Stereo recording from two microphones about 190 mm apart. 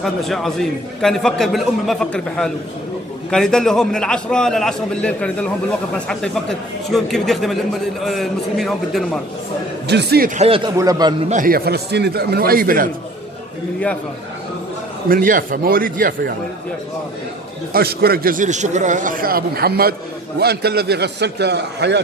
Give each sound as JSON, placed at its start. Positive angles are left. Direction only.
{"t": 0.0, "sound": "a man's voice", "side_deg": 0}
{"t": 9.8, "sound": "a man's voice", "side_deg": -60}
{"t": 10.4, "sound": "a man's voice", "side_deg": -30}
{"t": 11.2, "sound": "a man's voice", "side_deg": -45}
{"t": 15.0, "sound": "a man's voice", "side_deg": -45}
{"t": 17.7, "sound": "a man's voice", "side_deg": -55}